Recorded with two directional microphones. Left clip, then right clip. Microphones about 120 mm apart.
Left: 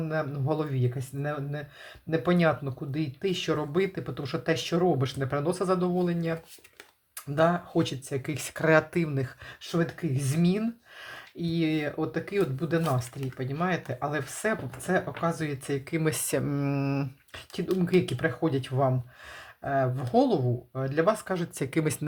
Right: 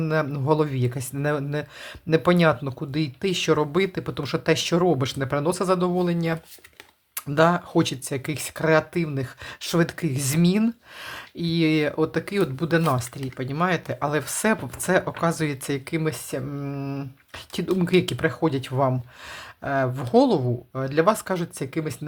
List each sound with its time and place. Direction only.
0.0 s speech: 35° right (ahead or behind)
8.2 s speech: 15° right (ahead or behind)
9.6 s speech: 50° right (ahead or behind); by 15.8 s 35° right (ahead or behind)
16.0 s speech: 5° left (ahead or behind); by 17.1 s 20° left (ahead or behind)
17.7 s speech: 30° right (ahead or behind)
21.6 s speech: 5° left (ahead or behind)